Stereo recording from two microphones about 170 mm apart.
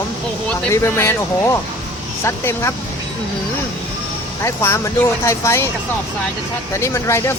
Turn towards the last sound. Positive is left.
turn(degrees=15)  # may be behind; listen again after turning